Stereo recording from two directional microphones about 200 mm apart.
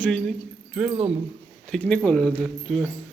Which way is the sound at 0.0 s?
5° left (ahead or behind).